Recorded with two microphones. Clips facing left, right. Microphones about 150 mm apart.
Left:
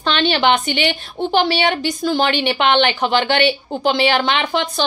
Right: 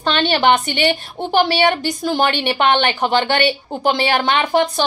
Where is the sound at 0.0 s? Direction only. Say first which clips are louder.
Right 1 dB; 45° right (ahead or behind).